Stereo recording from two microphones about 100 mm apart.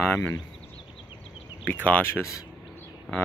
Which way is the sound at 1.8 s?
15° left (ahead or behind).